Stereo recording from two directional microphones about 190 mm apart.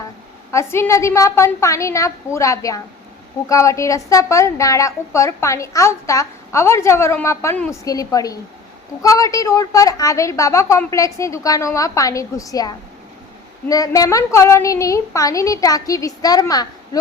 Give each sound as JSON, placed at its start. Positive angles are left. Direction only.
{"t": 0.5, "sound": "a woman's voice", "side_deg": 15}